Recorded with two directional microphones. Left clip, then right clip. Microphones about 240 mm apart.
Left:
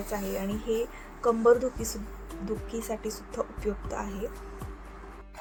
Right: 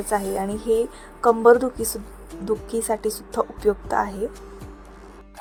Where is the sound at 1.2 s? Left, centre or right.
Right.